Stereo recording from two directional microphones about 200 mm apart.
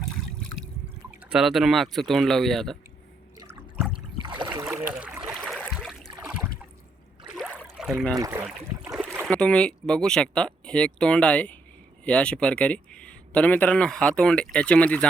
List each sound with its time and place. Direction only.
1.2 s speech: 5° right (ahead or behind)
3.5 s a sound: 5° right (ahead or behind)
4.2 s boat: 20° right (ahead or behind)
4.6 s a sound: 5° right (ahead or behind)
7.3 s rowboat: 5° right (ahead or behind)
7.8 s speech: centre (ahead or behind)
8.1 s speech: 15° right (ahead or behind)
8.8 s boat: 10° right (ahead or behind)
9.2 s speech: 5° left (ahead or behind)